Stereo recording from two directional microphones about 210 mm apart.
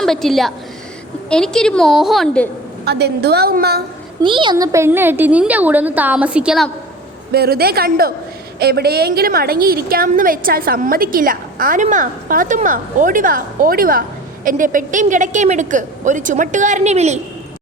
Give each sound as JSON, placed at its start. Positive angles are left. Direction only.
{"t": 0.0, "sound": "a woman's voice", "side_deg": 0}
{"t": 2.8, "sound": "a woman's voice", "side_deg": -50}
{"t": 4.2, "sound": "a woman's voice", "side_deg": -25}
{"t": 7.3, "sound": "a woman's voice", "side_deg": -50}